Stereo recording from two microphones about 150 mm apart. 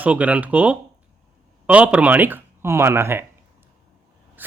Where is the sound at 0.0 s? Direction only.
10° right (ahead or behind).